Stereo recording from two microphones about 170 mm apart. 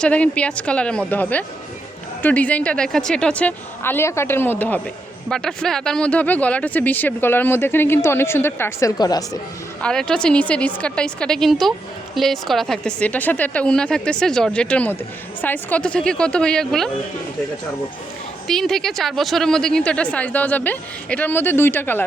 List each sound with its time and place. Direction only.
0.0 s speech: 5° left (ahead or behind)
9.8 s a woman's voice: 5° left (ahead or behind)
18.4 s speech: centre (ahead or behind)